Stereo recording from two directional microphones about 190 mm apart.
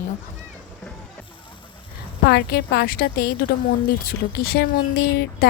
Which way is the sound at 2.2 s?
55° left (ahead or behind).